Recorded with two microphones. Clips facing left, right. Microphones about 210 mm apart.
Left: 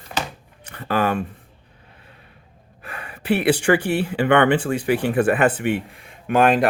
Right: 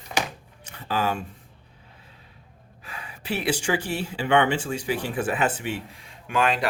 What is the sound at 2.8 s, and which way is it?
Speech, 60° left (ahead or behind).